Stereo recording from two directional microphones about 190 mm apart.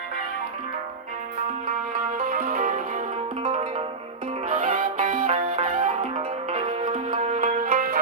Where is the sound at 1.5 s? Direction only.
35° right (ahead or behind).